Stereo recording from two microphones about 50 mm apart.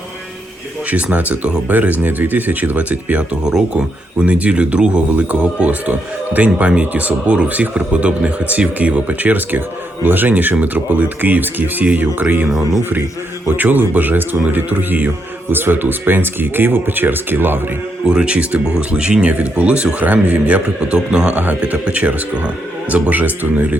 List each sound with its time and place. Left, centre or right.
0.9 s speech: right
13.6 s speech: right
18.0 s speech: centre
21.1 s speech: centre; by 23.6 s right